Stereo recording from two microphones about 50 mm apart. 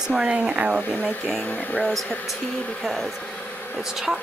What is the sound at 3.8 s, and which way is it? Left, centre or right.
Speech, centre.